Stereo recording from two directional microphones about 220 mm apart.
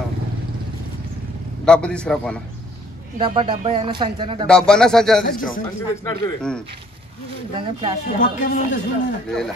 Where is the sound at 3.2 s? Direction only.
25° right (ahead or behind).